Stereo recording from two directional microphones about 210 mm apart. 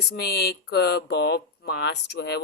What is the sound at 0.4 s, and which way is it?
Speech, 50° left (ahead or behind).